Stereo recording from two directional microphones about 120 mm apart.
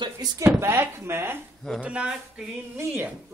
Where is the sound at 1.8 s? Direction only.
10° right (ahead or behind).